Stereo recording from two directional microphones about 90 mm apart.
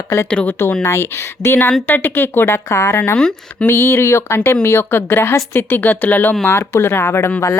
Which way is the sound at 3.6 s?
25° left (ahead or behind).